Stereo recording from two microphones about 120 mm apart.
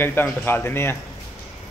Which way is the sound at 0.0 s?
20° left (ahead or behind).